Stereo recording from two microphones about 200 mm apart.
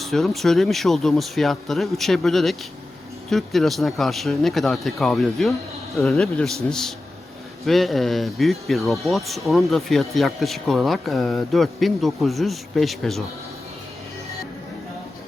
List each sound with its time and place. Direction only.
0.0 s speech: centre (ahead or behind)